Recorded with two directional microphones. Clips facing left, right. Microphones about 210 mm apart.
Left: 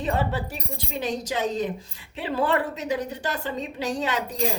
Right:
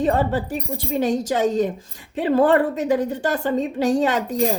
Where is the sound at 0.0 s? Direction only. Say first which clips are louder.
Right 6 dB; 45° right (ahead or behind).